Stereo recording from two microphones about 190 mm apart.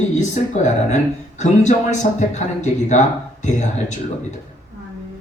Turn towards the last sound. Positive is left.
turn(degrees=40)  # may be behind; listen again after turning